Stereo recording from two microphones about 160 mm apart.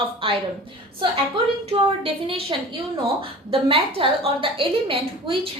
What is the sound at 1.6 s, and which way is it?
A woman's voice, 35° right (ahead or behind).